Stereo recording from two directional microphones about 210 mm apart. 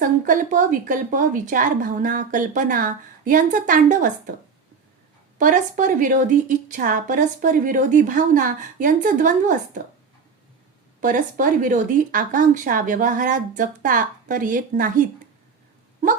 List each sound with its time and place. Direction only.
0.0 s a woman's voice: 40° right (ahead or behind)
5.4 s a woman's voice: 40° right (ahead or behind)
11.0 s a woman's voice: 40° right (ahead or behind)